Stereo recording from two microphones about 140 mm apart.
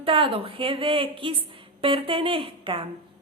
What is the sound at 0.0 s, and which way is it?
A woman's voice, 40° right (ahead or behind).